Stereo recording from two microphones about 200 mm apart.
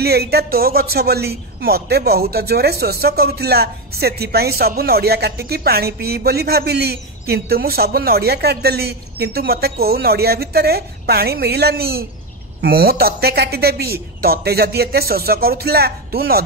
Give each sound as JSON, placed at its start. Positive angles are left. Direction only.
{"t": 0.0, "sound": "speech", "side_deg": -50}